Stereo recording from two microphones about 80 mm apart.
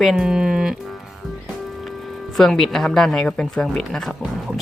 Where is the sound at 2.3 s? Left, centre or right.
Centre.